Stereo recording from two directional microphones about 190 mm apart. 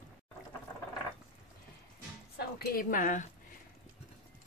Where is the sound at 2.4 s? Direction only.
50° left (ahead or behind).